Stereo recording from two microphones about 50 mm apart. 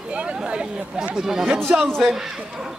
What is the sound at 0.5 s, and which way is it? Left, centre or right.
Speech, centre.